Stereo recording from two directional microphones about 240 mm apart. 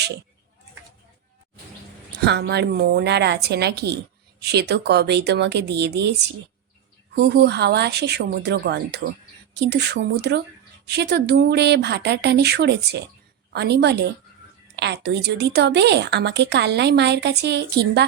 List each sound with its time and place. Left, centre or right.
2.2 s a woman's voice: right